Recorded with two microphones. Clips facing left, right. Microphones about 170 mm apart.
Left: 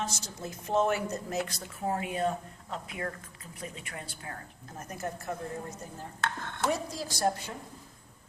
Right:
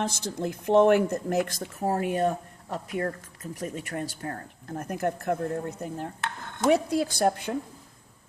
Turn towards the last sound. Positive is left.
turn(degrees=-60)  # may be behind; listen again after turning